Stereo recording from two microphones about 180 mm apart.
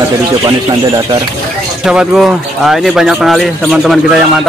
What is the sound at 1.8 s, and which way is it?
Speech, 5° right (ahead or behind).